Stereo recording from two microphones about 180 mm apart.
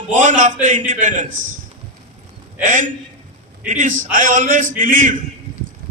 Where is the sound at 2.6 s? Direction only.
45° right (ahead or behind).